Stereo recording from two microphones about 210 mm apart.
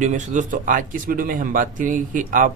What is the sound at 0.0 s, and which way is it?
Speech, 35° right (ahead or behind).